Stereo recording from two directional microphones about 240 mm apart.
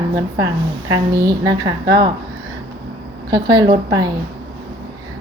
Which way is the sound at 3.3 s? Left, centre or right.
Centre.